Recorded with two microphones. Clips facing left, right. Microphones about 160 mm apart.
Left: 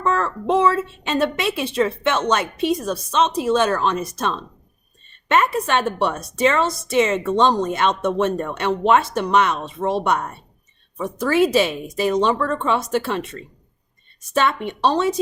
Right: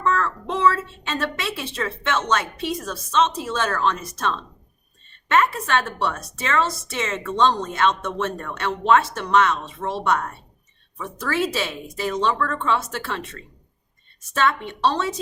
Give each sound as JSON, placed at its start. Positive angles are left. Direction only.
{"t": 0.0, "sound": "a woman's voice", "side_deg": 15}